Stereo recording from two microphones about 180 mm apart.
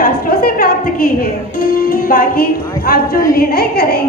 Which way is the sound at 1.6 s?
50° left (ahead or behind).